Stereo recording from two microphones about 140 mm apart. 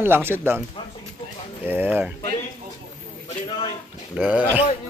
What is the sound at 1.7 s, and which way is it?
Speech, 15° right (ahead or behind).